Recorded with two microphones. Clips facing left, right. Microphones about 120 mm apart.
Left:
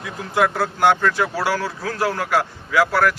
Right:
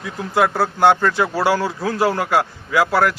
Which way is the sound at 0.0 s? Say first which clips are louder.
Right 2 dB; 10° right (ahead or behind).